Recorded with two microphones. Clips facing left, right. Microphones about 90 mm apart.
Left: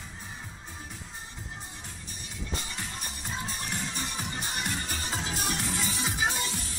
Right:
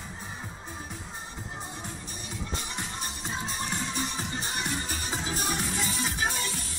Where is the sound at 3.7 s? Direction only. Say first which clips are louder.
Right 3 dB; 20° right (ahead or behind).